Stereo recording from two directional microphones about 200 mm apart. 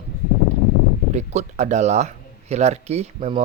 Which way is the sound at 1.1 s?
35° right (ahead or behind).